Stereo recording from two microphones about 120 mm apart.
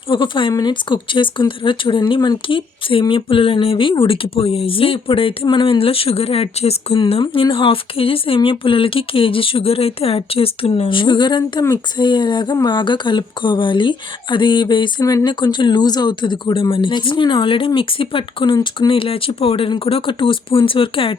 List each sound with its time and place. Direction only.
0.1 s speech: 45° left (ahead or behind)